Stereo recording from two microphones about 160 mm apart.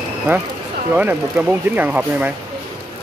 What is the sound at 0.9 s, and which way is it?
Speech, 10° right (ahead or behind).